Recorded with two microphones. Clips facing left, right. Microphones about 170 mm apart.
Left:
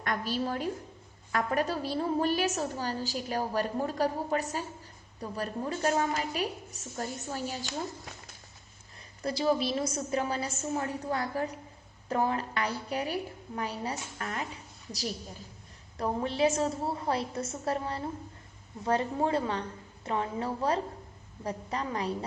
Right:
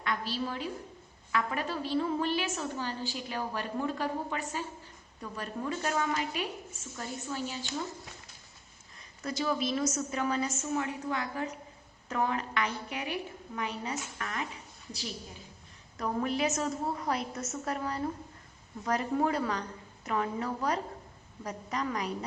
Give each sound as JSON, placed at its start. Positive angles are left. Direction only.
{"t": 0.0, "sound": "a woman's voice", "side_deg": 45}
{"t": 9.2, "sound": "a woman's voice", "side_deg": 30}
{"t": 16.0, "sound": "a woman's voice", "side_deg": 30}